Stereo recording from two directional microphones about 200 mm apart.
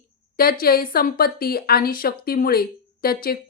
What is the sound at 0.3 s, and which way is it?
A woman's voice, 45° left (ahead or behind).